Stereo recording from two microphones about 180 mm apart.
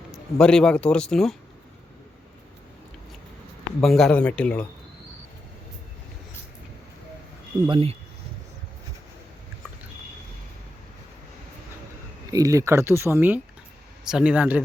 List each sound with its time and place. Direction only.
0.3 s speech: 5° left (ahead or behind)
3.8 s speech: centre (ahead or behind)
7.7 s speech: 30° right (ahead or behind)
12.3 s speech: 20° right (ahead or behind)